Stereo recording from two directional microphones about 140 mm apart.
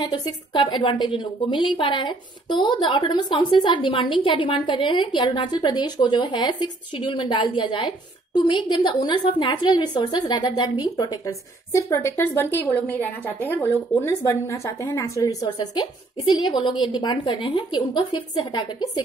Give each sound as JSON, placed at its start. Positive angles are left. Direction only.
{"t": 0.0, "sound": "a woman's voice", "side_deg": 35}